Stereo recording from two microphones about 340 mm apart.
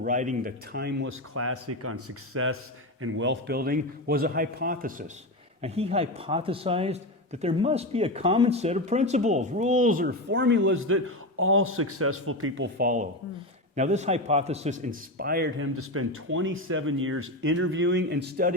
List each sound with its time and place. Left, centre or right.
0.0 s a man's voice: right